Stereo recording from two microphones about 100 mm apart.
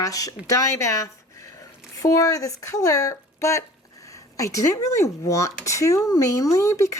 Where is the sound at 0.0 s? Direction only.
35° left (ahead or behind).